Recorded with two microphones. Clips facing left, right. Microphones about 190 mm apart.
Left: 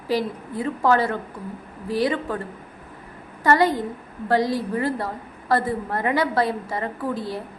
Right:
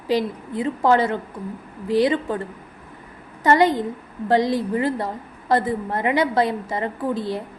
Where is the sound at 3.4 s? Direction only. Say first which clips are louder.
Right 2 dB; 20° right (ahead or behind).